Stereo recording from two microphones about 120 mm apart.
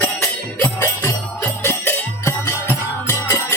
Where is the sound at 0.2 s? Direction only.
20° left (ahead or behind).